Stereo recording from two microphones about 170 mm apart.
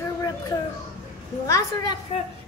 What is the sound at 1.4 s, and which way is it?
Speech, 20° left (ahead or behind).